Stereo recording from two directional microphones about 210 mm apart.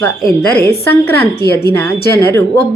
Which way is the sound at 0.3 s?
15° left (ahead or behind).